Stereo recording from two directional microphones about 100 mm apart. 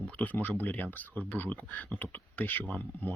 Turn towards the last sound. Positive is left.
turn(degrees=15)  # may be behind; listen again after turning